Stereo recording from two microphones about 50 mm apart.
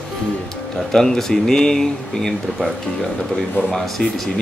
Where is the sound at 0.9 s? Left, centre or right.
Centre.